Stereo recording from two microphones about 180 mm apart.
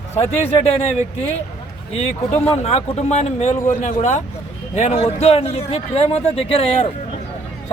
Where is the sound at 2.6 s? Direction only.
35° left (ahead or behind).